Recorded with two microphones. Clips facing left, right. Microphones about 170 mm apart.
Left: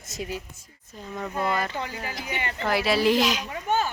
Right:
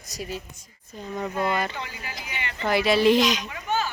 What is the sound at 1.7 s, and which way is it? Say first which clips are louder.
Speech: left 4 dB; 45° left (ahead or behind).